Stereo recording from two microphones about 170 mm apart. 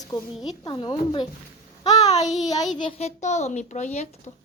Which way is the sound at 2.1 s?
40° left (ahead or behind).